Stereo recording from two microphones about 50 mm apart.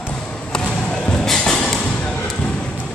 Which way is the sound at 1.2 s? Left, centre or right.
Centre.